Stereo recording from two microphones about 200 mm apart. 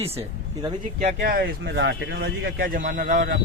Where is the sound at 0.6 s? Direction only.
30° right (ahead or behind).